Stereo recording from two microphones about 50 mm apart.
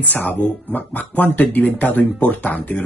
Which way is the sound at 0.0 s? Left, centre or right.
Left.